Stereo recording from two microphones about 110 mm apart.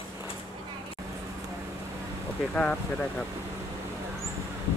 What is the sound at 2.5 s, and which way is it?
Speech, 10° left (ahead or behind).